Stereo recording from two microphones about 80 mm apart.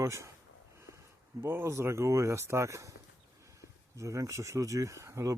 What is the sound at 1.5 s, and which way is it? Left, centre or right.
Speech, right.